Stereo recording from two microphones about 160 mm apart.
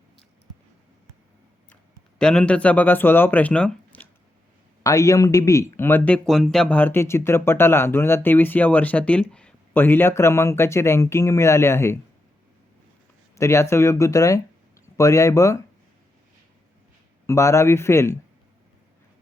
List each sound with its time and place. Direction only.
1.7 s speech: 5° left (ahead or behind)
4.8 s speech: 20° left (ahead or behind)
13.3 s speech: 20° left (ahead or behind)
17.2 s speech: 20° left (ahead or behind)